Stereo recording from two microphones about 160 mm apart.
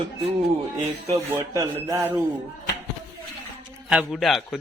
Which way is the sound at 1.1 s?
20° right (ahead or behind).